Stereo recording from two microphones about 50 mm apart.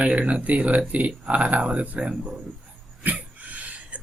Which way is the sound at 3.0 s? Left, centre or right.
Right.